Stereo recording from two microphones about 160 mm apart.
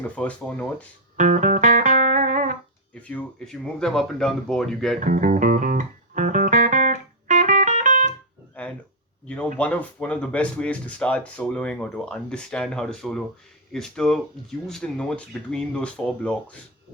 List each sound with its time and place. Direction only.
0.0 s speech: 10° left (ahead or behind)
1.1 s music: 50° right (ahead or behind)
2.9 s speech: 10° left (ahead or behind)
4.9 s music: 55° right (ahead or behind)
8.6 s a sound: 10° left (ahead or behind)
9.6 s speech: 10° left (ahead or behind)